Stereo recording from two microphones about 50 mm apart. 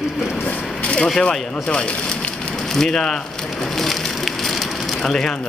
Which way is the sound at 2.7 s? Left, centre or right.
Centre.